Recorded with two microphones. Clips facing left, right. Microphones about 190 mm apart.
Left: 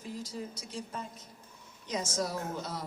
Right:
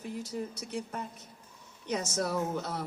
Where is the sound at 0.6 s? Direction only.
65° right (ahead or behind).